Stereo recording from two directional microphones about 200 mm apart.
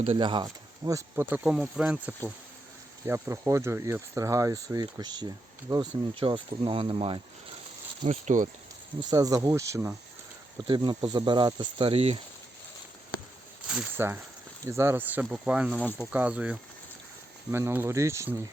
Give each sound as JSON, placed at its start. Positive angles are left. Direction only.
{"t": 0.0, "sound": "speech", "side_deg": -25}
{"t": 9.0, "sound": "speech", "side_deg": -20}
{"t": 13.7, "sound": "speech", "side_deg": -5}